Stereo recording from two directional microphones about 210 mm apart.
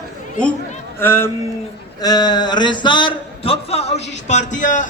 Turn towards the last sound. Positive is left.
turn(degrees=35)  # may be behind; listen again after turning